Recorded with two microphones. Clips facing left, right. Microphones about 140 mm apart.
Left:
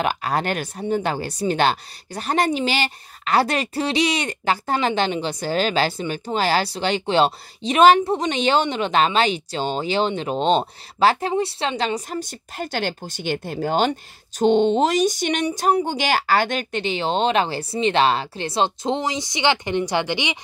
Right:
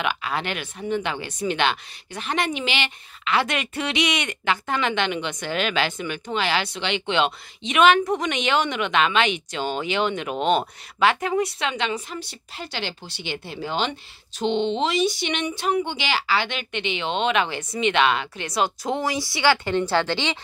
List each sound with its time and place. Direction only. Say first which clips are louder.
0.0 s speech: left 4 dB; 40° left (ahead or behind); by 20.3 s 15° left (ahead or behind)